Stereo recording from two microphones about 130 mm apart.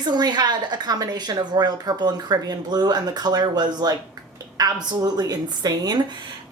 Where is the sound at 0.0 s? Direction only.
35° right (ahead or behind).